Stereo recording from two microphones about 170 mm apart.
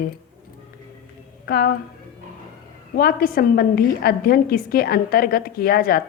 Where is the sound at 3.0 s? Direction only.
60° left (ahead or behind).